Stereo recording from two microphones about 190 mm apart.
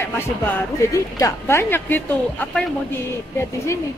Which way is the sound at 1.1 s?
15° left (ahead or behind).